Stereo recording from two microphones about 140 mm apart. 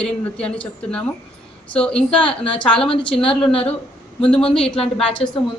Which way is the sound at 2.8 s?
35° left (ahead or behind).